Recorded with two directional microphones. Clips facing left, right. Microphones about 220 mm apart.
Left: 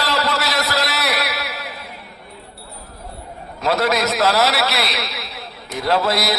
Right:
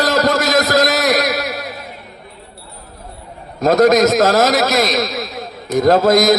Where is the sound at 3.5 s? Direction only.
45° right (ahead or behind).